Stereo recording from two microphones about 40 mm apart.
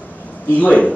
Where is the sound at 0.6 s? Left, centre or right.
Left.